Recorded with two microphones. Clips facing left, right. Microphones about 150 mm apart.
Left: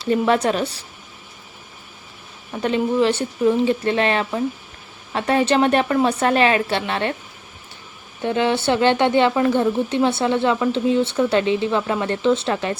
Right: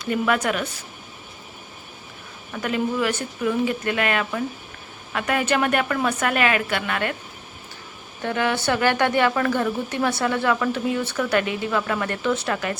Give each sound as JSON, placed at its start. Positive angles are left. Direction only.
{"t": 0.0, "sound": "a woman's voice", "side_deg": 30}
{"t": 2.5, "sound": "a woman's voice", "side_deg": 25}
{"t": 8.2, "sound": "a woman's voice", "side_deg": 20}